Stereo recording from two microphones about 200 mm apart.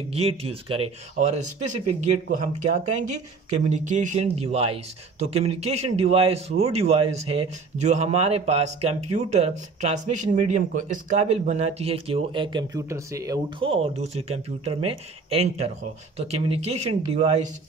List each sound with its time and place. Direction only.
0.1 s speech: 30° right (ahead or behind)